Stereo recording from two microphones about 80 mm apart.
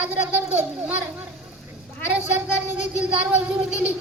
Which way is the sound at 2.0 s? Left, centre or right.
Centre.